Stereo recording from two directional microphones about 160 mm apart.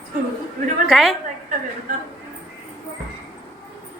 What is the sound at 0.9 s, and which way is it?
Speech, centre (ahead or behind).